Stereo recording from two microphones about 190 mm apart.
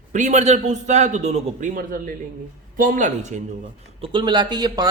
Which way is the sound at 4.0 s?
25° right (ahead or behind).